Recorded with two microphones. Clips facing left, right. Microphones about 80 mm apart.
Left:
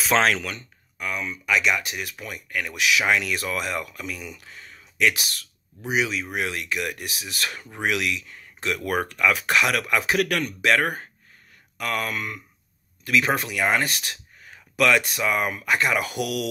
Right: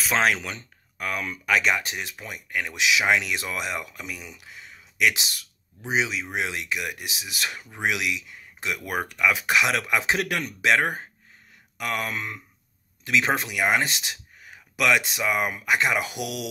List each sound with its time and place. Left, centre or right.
0.1 s speech: centre
0.9 s speech: right; by 16.4 s centre